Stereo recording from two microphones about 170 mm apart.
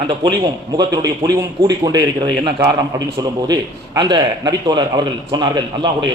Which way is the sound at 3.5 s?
25° right (ahead or behind).